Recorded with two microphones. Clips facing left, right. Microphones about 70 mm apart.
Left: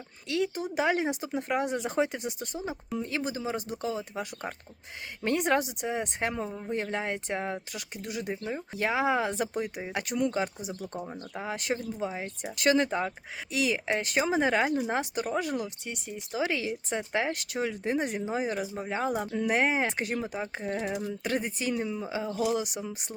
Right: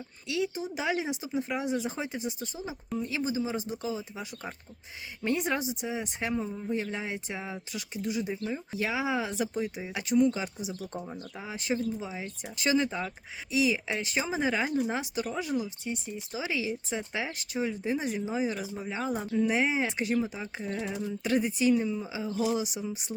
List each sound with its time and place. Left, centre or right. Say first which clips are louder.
0.3 s speech: left 2 dB; left
8.3 s speech: even; left
11.4 s speech: left 6 dB; left
11.7 s speech: right 2 dB; left
13.5 s speech: right 1 dB; left
21.1 s speech: right 3 dB; left